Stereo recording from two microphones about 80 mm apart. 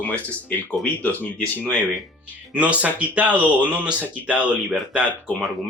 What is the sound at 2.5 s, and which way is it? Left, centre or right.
Speech, centre.